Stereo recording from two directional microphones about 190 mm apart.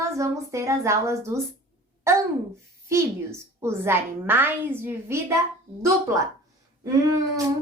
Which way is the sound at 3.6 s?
10° right (ahead or behind).